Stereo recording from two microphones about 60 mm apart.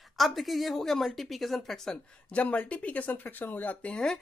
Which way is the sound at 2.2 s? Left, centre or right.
Left.